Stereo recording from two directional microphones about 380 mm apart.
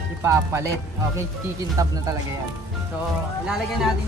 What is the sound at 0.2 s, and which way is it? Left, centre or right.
Music, centre.